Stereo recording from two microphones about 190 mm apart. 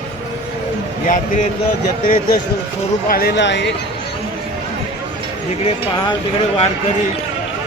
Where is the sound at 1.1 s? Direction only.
40° left (ahead or behind).